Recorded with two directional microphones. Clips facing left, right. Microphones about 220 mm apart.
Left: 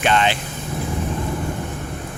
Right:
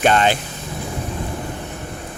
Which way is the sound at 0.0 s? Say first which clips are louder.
Right 3 dB; 45° right (ahead or behind).